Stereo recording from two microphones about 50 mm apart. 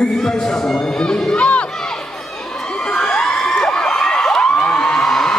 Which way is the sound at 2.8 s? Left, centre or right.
Centre.